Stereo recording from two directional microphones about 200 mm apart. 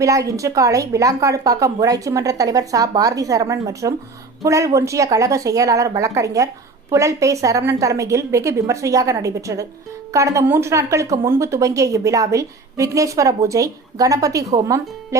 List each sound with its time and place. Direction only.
0.0 s a woman's voice: 15° right (ahead or behind)